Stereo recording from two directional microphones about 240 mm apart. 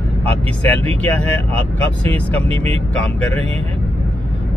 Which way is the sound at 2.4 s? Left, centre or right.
Right.